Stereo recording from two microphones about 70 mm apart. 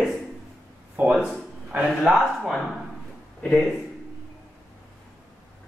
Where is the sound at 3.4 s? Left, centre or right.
Centre.